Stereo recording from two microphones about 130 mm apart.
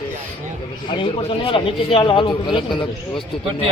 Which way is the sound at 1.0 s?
45° left (ahead or behind).